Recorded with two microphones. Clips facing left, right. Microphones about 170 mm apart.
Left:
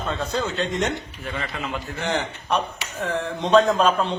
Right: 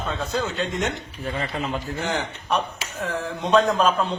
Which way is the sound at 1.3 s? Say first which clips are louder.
Right 3 dB; 35° right (ahead or behind).